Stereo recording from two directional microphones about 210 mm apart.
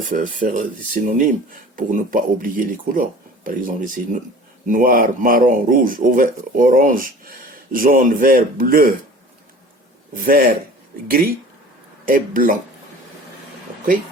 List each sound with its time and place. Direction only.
0.1 s speech: 40° right (ahead or behind)
10.2 s a man's voice: 45° right (ahead or behind)
12.0 s speech: 40° right (ahead or behind)